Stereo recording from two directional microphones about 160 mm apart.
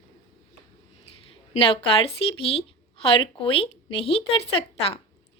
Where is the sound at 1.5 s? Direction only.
35° left (ahead or behind).